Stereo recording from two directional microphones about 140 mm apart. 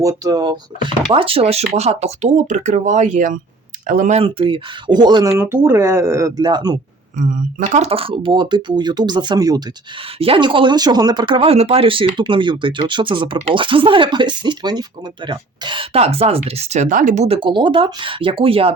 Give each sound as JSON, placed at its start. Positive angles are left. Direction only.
{"t": 0.0, "sound": "speech", "side_deg": -25}
{"t": 1.1, "sound": "speech", "side_deg": -40}
{"t": 4.2, "sound": "speech", "side_deg": -40}
{"t": 5.4, "sound": "speech", "side_deg": -15}
{"t": 7.2, "sound": "speech", "side_deg": -70}
{"t": 7.8, "sound": "speech", "side_deg": -45}
{"t": 10.2, "sound": "speech", "side_deg": -40}
{"t": 17.2, "sound": "speech", "side_deg": -40}